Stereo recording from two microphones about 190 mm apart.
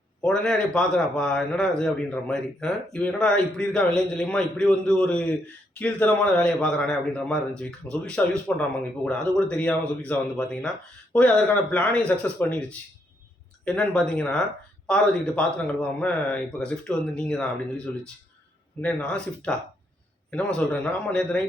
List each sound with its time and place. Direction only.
0.2 s a man's voice: 5° left (ahead or behind)